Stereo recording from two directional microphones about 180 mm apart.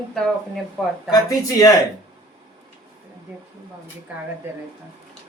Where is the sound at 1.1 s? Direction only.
20° left (ahead or behind).